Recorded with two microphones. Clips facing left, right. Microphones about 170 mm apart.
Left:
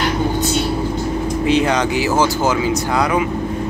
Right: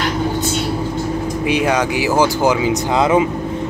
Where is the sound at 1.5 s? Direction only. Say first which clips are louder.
Left 1 dB; 10° right (ahead or behind).